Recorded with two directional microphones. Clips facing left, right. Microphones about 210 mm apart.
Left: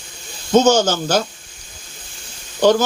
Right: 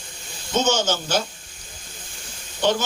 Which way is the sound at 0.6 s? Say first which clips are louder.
Left 8 dB; 40° left (ahead or behind).